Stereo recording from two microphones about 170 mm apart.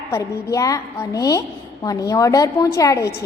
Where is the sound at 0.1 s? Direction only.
20° left (ahead or behind).